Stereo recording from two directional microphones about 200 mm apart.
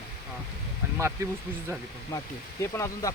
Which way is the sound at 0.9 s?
15° right (ahead or behind).